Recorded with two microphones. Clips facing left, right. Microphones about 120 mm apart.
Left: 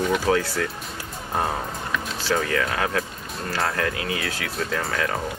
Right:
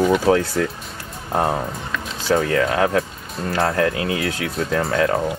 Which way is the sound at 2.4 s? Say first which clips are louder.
Right 8 dB; 30° right (ahead or behind).